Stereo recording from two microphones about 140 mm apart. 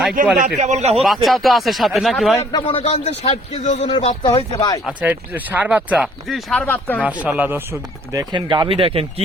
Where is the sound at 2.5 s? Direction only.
35° left (ahead or behind).